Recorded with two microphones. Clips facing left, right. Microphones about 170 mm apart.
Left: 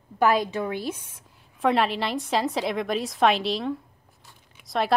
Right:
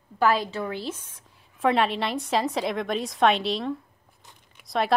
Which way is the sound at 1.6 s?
Centre (ahead or behind).